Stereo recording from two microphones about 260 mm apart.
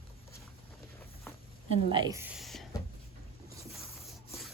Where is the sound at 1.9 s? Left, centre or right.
Centre.